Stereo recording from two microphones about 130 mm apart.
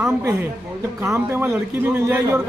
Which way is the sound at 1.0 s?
15° right (ahead or behind).